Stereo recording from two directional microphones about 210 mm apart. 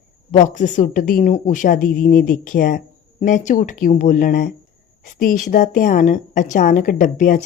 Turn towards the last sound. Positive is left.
turn(degrees=40)  # may be behind; listen again after turning